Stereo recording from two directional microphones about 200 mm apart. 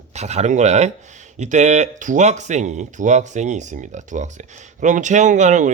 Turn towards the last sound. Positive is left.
turn(degrees=-40)  # may be behind; listen again after turning